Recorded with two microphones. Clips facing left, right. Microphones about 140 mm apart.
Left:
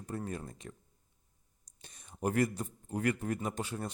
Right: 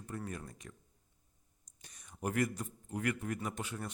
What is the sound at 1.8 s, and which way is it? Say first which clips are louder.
A man's voice: left 4 dB; 30° left (ahead or behind).